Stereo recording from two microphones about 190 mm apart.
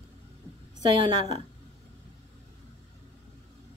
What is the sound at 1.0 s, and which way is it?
Speech, 20° right (ahead or behind).